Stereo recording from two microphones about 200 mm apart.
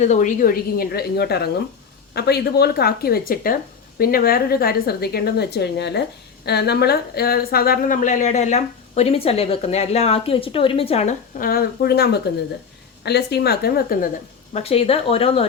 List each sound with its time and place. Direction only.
0.0 s a woman's voice: 35° left (ahead or behind)
14.5 s speech: 30° left (ahead or behind)